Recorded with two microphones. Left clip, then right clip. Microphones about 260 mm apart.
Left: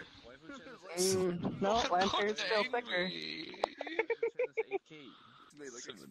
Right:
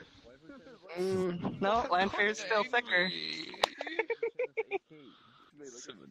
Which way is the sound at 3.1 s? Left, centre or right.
Centre.